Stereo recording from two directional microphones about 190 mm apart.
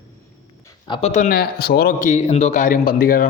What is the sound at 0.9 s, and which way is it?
A man's voice, 35° left (ahead or behind).